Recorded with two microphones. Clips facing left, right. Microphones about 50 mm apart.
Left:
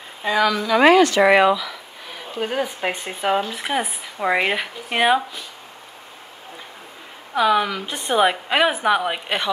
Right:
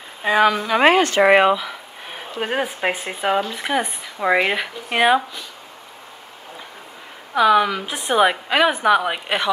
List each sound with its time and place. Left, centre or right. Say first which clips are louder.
0.3 s speech: right 2 dB; right
2.8 s speech: right 2 dB; centre
3.4 s speech: right 2 dB; centre
7.3 s speech: right 3 dB; centre
8.5 s speech: right 2 dB; centre